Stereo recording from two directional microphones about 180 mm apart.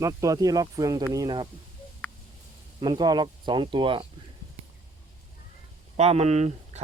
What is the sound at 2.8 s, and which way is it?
Speech, 25° right (ahead or behind).